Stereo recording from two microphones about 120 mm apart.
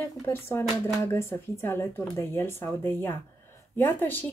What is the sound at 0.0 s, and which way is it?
A woman's voice, 20° left (ahead or behind).